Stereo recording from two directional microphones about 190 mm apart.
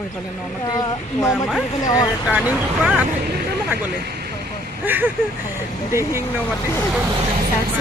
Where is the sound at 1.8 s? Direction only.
20° left (ahead or behind).